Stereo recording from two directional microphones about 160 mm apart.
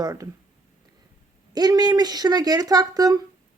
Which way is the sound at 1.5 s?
25° right (ahead or behind).